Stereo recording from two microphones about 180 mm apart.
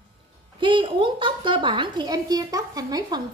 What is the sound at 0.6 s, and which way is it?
A woman's voice, 25° right (ahead or behind).